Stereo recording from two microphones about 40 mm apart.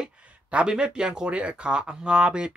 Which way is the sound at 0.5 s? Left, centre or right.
Right.